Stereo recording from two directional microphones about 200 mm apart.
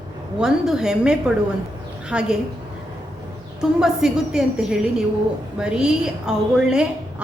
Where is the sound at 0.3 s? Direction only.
5° right (ahead or behind).